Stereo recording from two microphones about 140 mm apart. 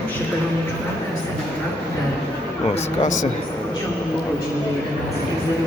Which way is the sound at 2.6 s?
50° left (ahead or behind).